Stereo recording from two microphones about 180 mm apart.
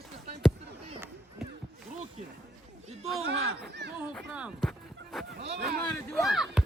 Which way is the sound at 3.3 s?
80° right.